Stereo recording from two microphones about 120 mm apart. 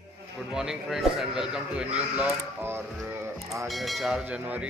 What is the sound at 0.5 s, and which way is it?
Speech, 5° right (ahead or behind).